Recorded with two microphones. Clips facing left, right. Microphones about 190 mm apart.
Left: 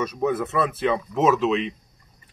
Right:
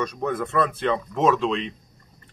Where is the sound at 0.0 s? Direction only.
5° left (ahead or behind).